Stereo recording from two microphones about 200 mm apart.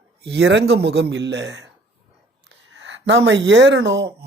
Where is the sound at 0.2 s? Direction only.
60° right (ahead or behind).